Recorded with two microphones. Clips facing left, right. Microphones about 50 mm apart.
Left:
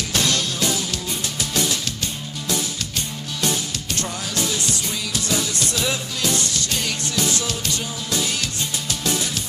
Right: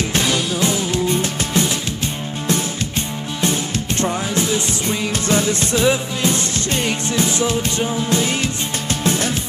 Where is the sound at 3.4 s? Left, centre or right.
Right.